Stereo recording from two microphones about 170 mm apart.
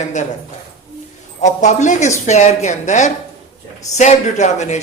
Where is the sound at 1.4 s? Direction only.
45° left (ahead or behind).